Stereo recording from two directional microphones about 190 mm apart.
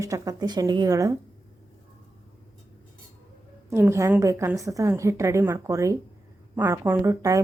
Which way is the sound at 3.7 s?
15° right (ahead or behind).